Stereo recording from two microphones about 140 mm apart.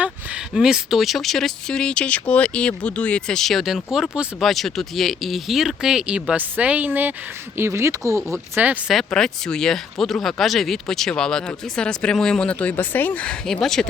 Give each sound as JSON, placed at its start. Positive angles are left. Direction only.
{"t": 0.0, "sound": "speech", "side_deg": -5}
{"t": 9.0, "sound": "speech", "side_deg": 5}